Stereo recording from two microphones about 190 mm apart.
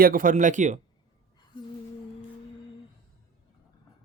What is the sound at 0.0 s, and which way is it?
Speech, 45° right (ahead or behind).